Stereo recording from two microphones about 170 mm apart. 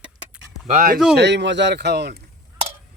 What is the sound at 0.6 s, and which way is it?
Speech, 50° right (ahead or behind).